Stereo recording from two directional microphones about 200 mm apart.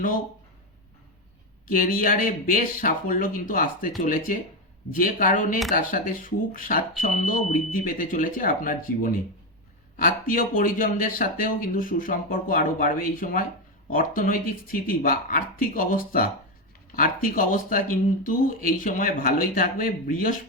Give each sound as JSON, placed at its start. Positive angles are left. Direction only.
{"t": 1.7, "sound": "speech", "side_deg": 45}